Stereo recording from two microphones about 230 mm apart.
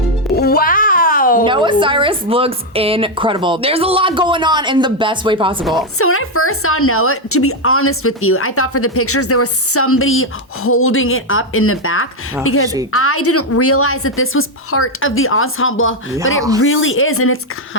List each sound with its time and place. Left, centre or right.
0.3 s a sound: left
1.5 s a woman's voice: right
6.0 s speech: left